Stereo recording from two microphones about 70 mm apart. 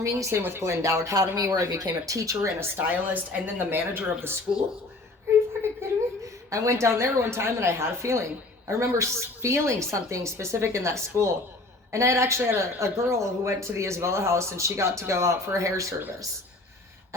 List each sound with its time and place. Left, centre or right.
0.0 s speech: right
1.3 s a woman's voice: right
1.5 s speech: right
2.9 s speech: right
5.6 s a sound: right
6.5 s a woman's voice: right